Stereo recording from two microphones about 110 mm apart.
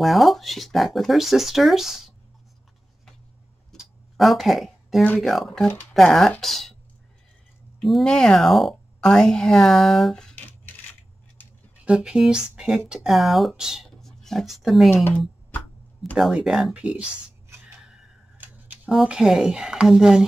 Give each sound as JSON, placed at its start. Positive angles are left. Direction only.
{"t": 0.0, "sound": "speech", "side_deg": 0}
{"t": 3.7, "sound": "a sound", "side_deg": 0}
{"t": 5.2, "sound": "speech", "side_deg": 0}
{"t": 7.8, "sound": "a sound", "side_deg": 5}
{"t": 11.8, "sound": "speech", "side_deg": -10}
{"t": 13.8, "sound": "pig", "side_deg": 5}
{"t": 15.0, "sound": "a sound", "side_deg": 15}
{"t": 16.2, "sound": "speech", "side_deg": -5}
{"t": 18.9, "sound": "speech", "side_deg": -5}